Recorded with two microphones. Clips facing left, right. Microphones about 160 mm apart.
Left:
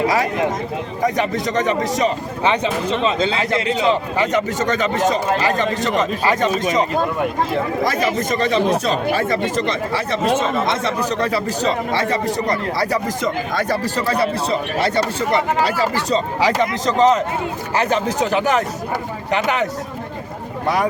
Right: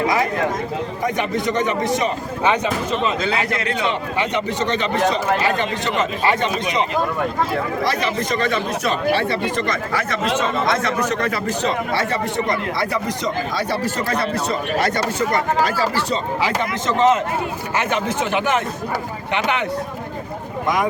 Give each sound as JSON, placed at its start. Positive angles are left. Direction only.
{"t": 1.0, "sound": "a man's voice", "side_deg": 35}
{"t": 3.0, "sound": "a man's voice", "side_deg": 25}
{"t": 3.8, "sound": "a man's voice", "side_deg": 40}
{"t": 7.9, "sound": "a man's voice", "side_deg": 45}
{"t": 8.4, "sound": "a man's voice", "side_deg": 30}
{"t": 9.6, "sound": "a man's voice", "side_deg": 30}
{"t": 13.2, "sound": "a man's voice", "side_deg": 50}